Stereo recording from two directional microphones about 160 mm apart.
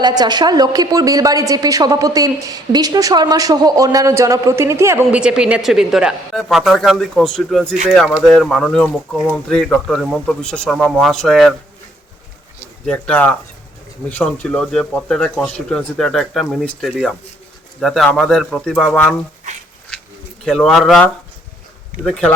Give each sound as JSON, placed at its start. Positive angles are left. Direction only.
{"t": 0.0, "sound": "a woman's voice", "side_deg": -25}
{"t": 12.8, "sound": "speech", "side_deg": 5}
{"t": 20.4, "sound": "speech", "side_deg": 5}
{"t": 22.0, "sound": "speech", "side_deg": 5}